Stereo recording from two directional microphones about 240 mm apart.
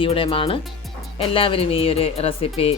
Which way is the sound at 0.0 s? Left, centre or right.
Left.